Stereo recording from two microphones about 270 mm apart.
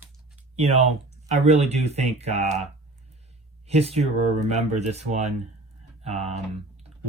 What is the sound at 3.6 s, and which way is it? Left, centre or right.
Speech, right.